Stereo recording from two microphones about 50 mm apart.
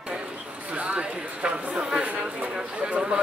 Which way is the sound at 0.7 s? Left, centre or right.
Right.